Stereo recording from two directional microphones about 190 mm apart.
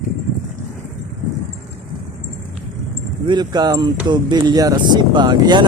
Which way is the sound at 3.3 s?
20° right (ahead or behind).